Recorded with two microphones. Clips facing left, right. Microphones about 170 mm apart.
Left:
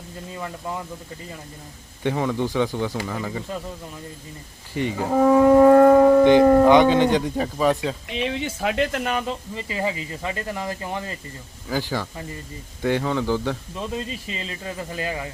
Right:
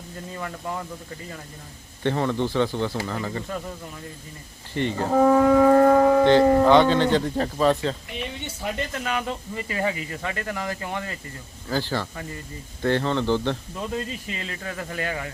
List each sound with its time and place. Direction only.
2.0 s speech: 10° left (ahead or behind)
4.7 s speech: 10° left (ahead or behind)
5.5 s shofar: 45° left (ahead or behind)
6.7 s speech: 15° left (ahead or behind)
8.1 s speech: 90° left
9.2 s speech: 25° left (ahead or behind)
11.7 s speech: 10° left (ahead or behind)
14.3 s speech: 20° left (ahead or behind)